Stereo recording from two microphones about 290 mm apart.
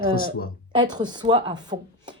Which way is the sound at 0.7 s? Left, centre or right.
Centre.